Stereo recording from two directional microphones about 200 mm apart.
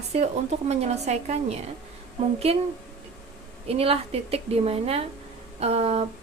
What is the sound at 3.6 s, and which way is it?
A woman's voice, 30° right (ahead or behind).